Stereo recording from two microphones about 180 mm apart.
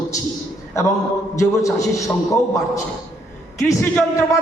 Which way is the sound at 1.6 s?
15° left (ahead or behind).